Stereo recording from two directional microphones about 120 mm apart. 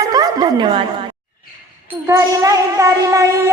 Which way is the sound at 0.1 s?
35° right (ahead or behind).